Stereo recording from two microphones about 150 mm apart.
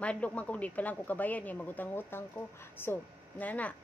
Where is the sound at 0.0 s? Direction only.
10° left (ahead or behind).